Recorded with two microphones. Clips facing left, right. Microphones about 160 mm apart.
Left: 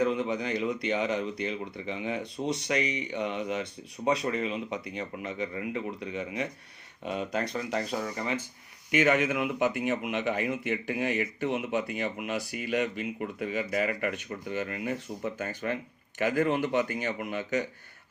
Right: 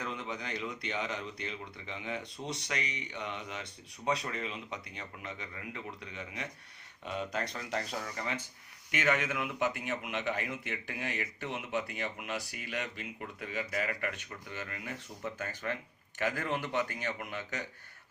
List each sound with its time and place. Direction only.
0.0 s speech: 15° left (ahead or behind)